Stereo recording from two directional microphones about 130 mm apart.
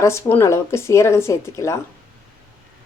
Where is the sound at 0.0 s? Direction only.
20° left (ahead or behind).